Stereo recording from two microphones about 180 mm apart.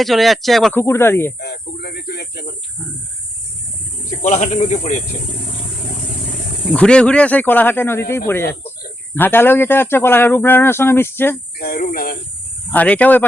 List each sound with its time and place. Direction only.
0.0 s speech: centre (ahead or behind)
1.4 s speech: 65° left (ahead or behind)
4.2 s speech: 40° left (ahead or behind)
6.7 s speech: 5° left (ahead or behind)
11.6 s cricket: 55° left (ahead or behind)
12.7 s speech: 10° left (ahead or behind)